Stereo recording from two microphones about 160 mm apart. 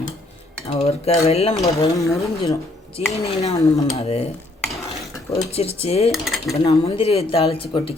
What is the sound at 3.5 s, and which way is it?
Speech, 20° left (ahead or behind).